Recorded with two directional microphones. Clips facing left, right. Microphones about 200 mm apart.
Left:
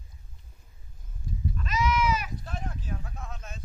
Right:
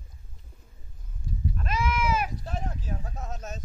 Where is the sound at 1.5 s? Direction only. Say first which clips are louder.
Left 2 dB; 50° right (ahead or behind).